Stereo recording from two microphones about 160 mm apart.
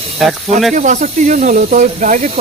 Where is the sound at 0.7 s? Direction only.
55° right (ahead or behind).